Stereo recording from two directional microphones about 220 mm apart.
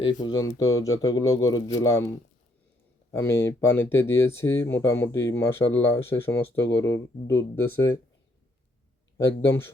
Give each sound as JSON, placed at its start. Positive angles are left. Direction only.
{"t": 0.0, "sound": "speech", "side_deg": 20}
{"t": 3.1, "sound": "speech", "side_deg": 10}
{"t": 9.1, "sound": "speech", "side_deg": 10}